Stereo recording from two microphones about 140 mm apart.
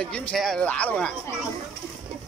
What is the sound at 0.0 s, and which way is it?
Speech, 5° left (ahead or behind).